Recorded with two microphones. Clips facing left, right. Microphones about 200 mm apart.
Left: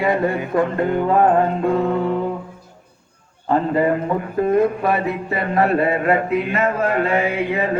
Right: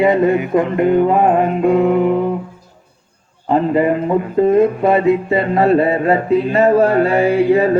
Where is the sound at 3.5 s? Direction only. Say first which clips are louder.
Right 3 dB; 20° right (ahead or behind); by 7.7 s 35° right (ahead or behind).